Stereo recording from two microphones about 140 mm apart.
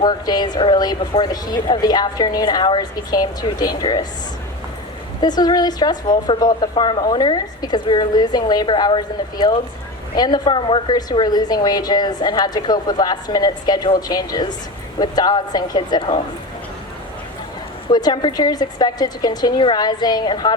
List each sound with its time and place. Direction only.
0.0 s a woman's voice: 30° left (ahead or behind)
5.2 s a woman's voice: 30° left (ahead or behind)
17.8 s a woman's voice: 30° left (ahead or behind)